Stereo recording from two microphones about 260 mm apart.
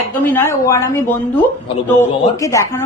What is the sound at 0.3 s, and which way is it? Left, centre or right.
Speech, centre.